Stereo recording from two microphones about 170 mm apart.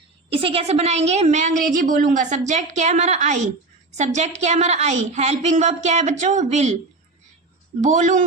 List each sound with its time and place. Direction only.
0.3 s a woman's voice: 35° right (ahead or behind)
7.8 s a woman's voice: 45° right (ahead or behind)